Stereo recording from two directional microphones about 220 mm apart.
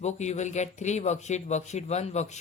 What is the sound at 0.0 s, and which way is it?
Speech, 30° left (ahead or behind).